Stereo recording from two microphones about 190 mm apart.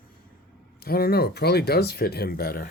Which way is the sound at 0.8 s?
55° left (ahead or behind).